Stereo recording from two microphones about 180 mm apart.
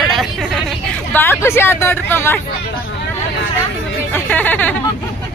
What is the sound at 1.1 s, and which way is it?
Speech, 10° left (ahead or behind).